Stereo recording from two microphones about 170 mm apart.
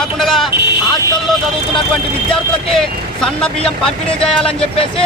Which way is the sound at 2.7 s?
Centre (ahead or behind).